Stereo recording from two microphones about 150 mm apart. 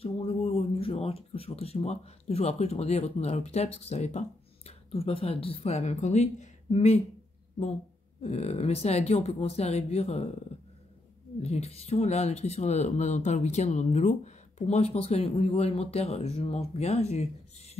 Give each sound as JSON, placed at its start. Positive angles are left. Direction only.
{"t": 0.0, "sound": "speech", "side_deg": 40}
{"t": 8.2, "sound": "speech", "side_deg": 45}
{"t": 11.4, "sound": "speech", "side_deg": 45}